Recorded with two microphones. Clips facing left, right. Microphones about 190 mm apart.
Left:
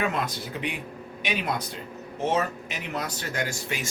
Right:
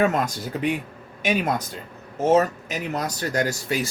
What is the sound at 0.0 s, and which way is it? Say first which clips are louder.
Speech: right 6 dB; 45° right (ahead or behind).